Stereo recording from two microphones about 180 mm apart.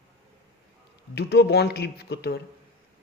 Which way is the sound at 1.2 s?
65° left (ahead or behind).